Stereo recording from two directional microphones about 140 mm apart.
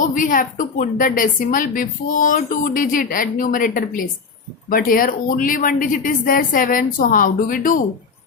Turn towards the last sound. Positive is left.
turn(degrees=70)  # may be behind; listen again after turning